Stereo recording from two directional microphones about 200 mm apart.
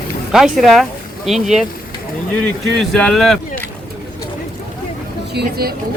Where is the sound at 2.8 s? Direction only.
Centre (ahead or behind).